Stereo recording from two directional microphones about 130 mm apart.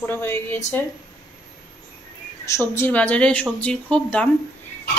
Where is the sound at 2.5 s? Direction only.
20° left (ahead or behind).